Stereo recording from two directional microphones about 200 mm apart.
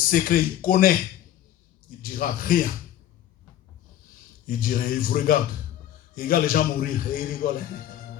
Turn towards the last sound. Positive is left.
turn(degrees=45)  # may be behind; listen again after turning